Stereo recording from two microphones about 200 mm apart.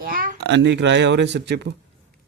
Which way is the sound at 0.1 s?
45° right (ahead or behind).